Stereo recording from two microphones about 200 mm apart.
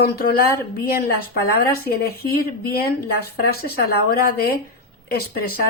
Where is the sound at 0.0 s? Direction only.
50° left (ahead or behind).